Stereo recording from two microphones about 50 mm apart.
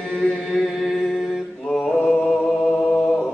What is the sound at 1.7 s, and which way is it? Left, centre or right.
Mantra, centre.